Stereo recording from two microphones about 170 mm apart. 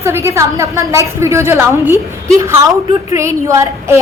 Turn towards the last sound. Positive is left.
turn(degrees=-15)  # may be behind; listen again after turning